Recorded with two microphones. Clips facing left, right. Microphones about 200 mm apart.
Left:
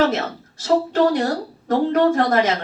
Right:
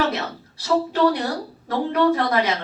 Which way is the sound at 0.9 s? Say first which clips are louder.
Left 2 dB; 45° left (ahead or behind).